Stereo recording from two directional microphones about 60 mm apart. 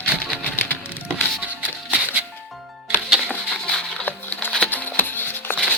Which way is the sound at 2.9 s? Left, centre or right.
Right.